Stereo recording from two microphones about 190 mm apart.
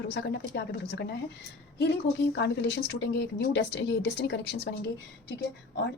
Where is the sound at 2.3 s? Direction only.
60° left (ahead or behind).